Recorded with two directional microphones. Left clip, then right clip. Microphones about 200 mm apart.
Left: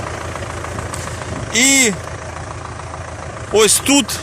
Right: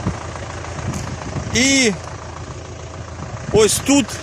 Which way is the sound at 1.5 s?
15° right (ahead or behind).